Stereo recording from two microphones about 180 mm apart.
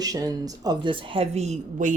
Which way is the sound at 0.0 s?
20° right (ahead or behind).